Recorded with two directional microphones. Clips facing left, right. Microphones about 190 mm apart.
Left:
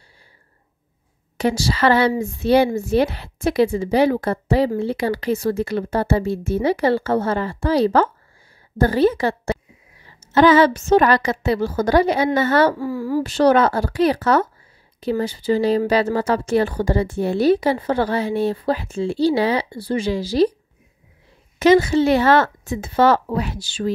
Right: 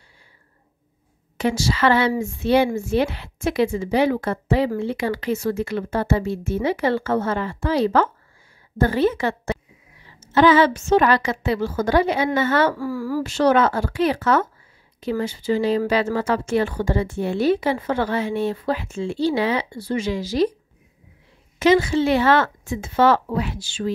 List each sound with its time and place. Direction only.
1.4 s a woman's voice: 35° left (ahead or behind)
12.7 s a woman's voice: 20° left (ahead or behind)
13.2 s a woman's voice: 35° left (ahead or behind)
21.5 s a woman's voice: 40° left (ahead or behind)